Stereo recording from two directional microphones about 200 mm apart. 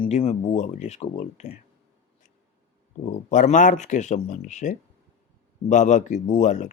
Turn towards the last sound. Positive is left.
turn(degrees=35)  # may be behind; listen again after turning